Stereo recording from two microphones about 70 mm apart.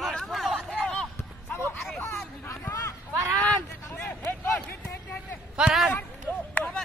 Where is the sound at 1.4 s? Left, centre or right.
Left.